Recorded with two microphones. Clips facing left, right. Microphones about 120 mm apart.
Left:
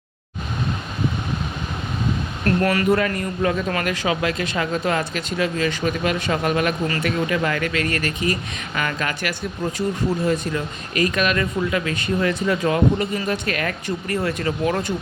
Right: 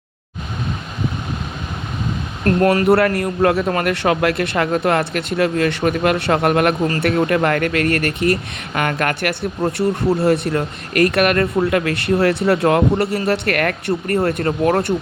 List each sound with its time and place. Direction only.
2.4 s speech: 40° right (ahead or behind)
2.8 s a man's voice: 65° right (ahead or behind)